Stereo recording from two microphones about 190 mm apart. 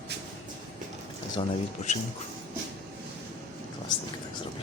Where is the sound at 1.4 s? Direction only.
35° left (ahead or behind).